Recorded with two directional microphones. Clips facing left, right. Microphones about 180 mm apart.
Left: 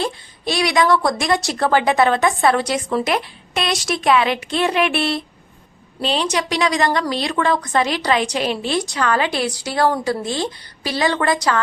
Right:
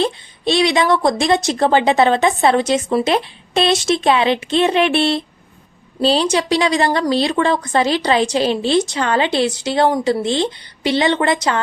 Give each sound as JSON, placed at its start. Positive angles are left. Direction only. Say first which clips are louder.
{"t": 0.0, "sound": "a woman's voice", "louder": "right 5 dB", "side_deg": -25}